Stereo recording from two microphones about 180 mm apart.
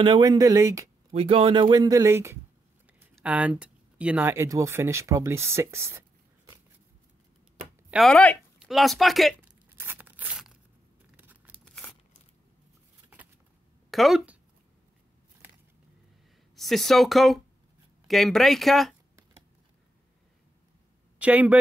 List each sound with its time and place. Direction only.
0.0 s speech: 25° right (ahead or behind)
1.1 s speech: 30° right (ahead or behind); by 5.9 s 15° right (ahead or behind)
7.9 s speech: 5° left (ahead or behind)
9.7 s tearing: 10° right (ahead or behind)
11.1 s scissors: 10° right (ahead or behind)
11.6 s crumpling: 5° left (ahead or behind)
13.8 s speech: centre (ahead or behind)
16.5 s speech: centre (ahead or behind)
21.2 s speech: 10° right (ahead or behind)